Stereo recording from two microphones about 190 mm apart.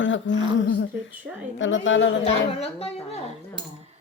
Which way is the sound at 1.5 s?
85° left.